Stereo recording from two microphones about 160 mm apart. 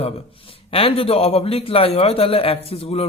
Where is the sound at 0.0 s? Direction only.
35° left (ahead or behind).